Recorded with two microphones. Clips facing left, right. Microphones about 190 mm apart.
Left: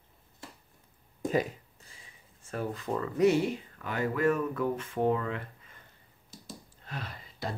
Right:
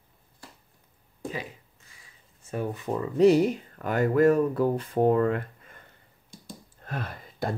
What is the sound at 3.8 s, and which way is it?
Speech, 45° right (ahead or behind).